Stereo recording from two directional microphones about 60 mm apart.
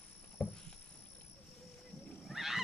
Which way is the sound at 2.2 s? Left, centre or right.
Centre.